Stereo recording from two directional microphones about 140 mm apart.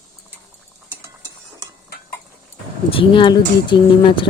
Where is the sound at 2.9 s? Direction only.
35° left (ahead or behind).